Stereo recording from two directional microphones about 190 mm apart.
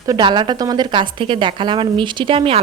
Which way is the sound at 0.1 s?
25° right (ahead or behind).